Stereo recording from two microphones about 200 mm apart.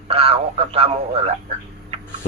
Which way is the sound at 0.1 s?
30° right (ahead or behind).